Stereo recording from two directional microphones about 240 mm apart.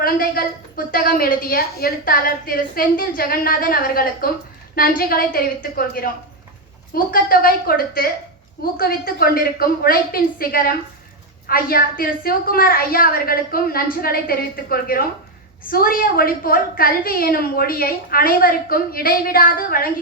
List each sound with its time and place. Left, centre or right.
0.0 s a woman's voice: left